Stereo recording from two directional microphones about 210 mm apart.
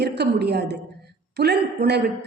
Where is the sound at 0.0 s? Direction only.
50° right (ahead or behind).